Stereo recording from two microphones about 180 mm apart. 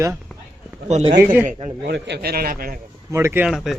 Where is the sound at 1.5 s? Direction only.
45° right (ahead or behind).